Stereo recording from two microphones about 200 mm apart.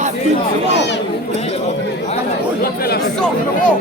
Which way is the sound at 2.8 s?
50° left (ahead or behind).